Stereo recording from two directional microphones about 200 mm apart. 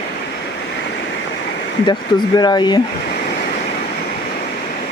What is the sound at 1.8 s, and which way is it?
Speech, 20° left (ahead or behind).